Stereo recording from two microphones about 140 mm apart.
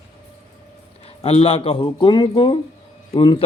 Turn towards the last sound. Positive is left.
turn(degrees=40)  # may be behind; listen again after turning